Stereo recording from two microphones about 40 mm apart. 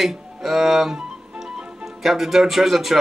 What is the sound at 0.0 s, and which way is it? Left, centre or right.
Speech, centre.